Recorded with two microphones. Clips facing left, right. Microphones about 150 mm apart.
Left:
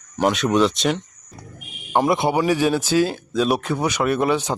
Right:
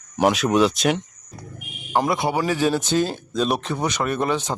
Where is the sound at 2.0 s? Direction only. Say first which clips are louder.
Left 5 dB; 20° left (ahead or behind).